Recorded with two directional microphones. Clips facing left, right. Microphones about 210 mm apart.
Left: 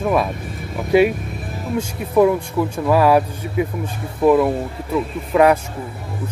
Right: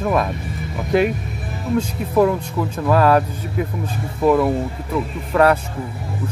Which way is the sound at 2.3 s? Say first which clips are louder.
Left 2 dB; 10° left (ahead or behind).